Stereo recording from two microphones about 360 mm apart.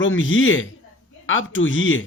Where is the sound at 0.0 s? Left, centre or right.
Left.